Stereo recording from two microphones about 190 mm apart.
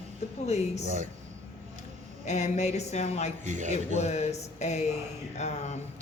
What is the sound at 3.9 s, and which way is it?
A woman's voice, 35° left (ahead or behind).